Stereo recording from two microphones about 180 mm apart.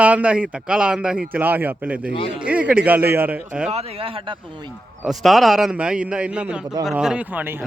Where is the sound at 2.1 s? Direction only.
30° left (ahead or behind).